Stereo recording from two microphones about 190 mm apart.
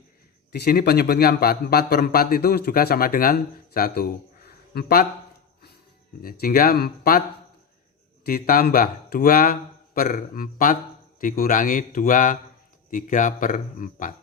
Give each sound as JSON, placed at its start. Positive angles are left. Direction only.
{"t": 0.5, "sound": "a man's voice", "side_deg": 55}
{"t": 6.2, "sound": "a man's voice", "side_deg": 50}
{"t": 8.2, "sound": "a man's voice", "side_deg": 50}